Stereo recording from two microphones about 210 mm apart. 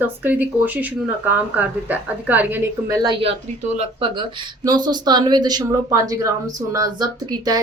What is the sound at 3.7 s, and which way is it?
Speech, 25° right (ahead or behind).